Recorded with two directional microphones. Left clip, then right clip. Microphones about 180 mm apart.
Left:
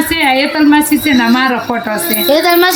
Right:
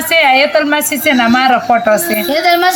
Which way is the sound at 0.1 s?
50° right (ahead or behind).